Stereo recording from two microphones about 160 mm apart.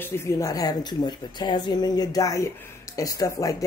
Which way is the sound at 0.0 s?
15° left (ahead or behind).